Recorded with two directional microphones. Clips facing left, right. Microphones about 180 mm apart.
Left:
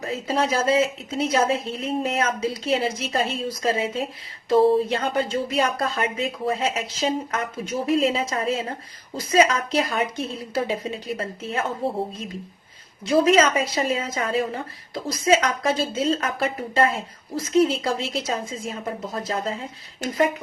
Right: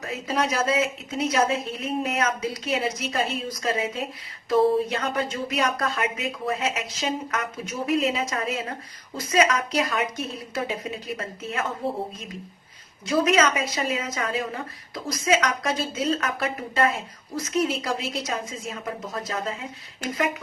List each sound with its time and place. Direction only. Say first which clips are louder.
0.0 s a woman's voice: left 2 dB; 30° left (ahead or behind)
13.1 s a woman's voice: left 3 dB; 30° left (ahead or behind)